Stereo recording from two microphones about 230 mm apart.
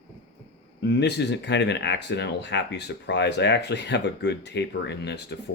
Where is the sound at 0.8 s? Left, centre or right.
Left.